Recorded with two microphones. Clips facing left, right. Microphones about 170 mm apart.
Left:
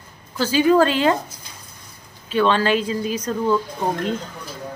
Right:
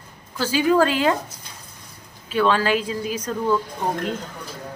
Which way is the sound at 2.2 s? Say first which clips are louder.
Left 1 dB; 5° right (ahead or behind).